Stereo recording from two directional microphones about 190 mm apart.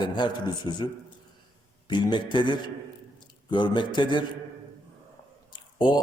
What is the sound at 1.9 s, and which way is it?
A man's voice, 25° left (ahead or behind).